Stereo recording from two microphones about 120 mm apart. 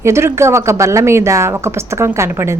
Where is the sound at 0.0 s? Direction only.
20° right (ahead or behind).